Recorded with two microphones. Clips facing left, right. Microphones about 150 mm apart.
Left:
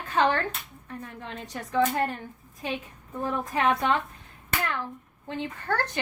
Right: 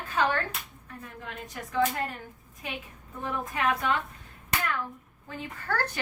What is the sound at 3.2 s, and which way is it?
Speech, 30° left (ahead or behind).